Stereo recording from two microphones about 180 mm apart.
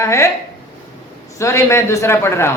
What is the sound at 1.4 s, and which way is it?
A woman's voice, 15° left (ahead or behind).